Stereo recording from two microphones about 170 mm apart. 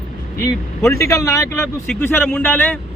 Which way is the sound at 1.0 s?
20° left (ahead or behind).